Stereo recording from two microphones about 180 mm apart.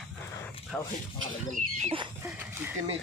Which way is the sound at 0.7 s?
5° left (ahead or behind).